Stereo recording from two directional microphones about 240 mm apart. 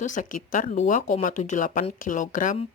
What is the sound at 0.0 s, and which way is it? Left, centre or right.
A woman's voice, left.